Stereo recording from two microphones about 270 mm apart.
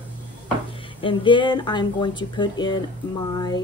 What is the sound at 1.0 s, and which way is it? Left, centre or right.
Speech, centre.